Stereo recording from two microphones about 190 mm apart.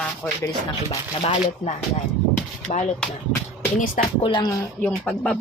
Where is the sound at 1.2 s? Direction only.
35° left (ahead or behind).